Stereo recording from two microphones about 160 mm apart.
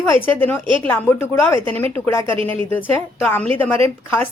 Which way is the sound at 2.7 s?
10° left (ahead or behind).